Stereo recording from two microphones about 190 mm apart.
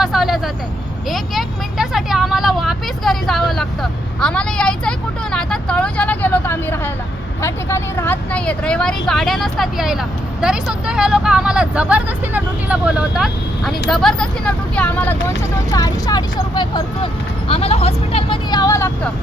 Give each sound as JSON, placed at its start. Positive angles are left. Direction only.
{"t": 0.0, "sound": "vehicle", "side_deg": 0}
{"t": 1.1, "sound": "speech", "side_deg": 0}